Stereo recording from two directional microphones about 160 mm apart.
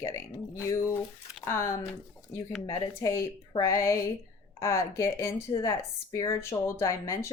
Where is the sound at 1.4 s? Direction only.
15° left (ahead or behind).